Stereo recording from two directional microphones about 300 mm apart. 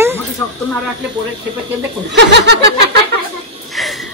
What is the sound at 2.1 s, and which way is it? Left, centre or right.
Snicker, right.